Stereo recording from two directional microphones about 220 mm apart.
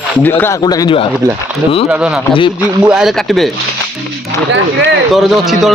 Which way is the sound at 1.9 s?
5° right (ahead or behind).